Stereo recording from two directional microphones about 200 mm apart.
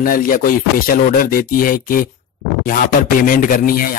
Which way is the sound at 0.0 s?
45° left (ahead or behind).